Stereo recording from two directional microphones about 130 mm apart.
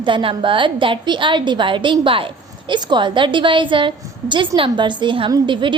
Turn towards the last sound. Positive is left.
turn(degrees=-40)  # may be behind; listen again after turning